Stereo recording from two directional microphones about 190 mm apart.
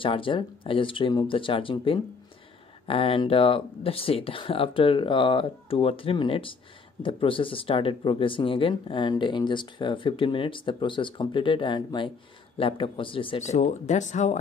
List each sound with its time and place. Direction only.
0.0 s speech: 25° left (ahead or behind)